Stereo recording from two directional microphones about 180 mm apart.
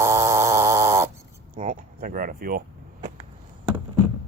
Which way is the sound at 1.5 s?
50° right (ahead or behind).